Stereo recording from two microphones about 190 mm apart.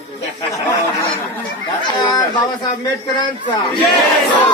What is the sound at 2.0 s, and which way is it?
Speech, 25° left (ahead or behind).